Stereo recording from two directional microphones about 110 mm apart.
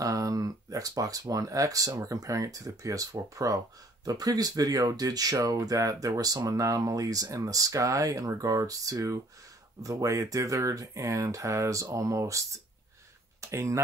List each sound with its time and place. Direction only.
0.0 s speech: 30° right (ahead or behind)
13.5 s speech: 25° right (ahead or behind)